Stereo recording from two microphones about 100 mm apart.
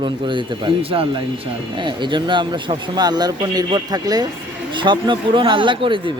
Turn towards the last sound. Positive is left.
turn(degrees=-55)  # may be behind; listen again after turning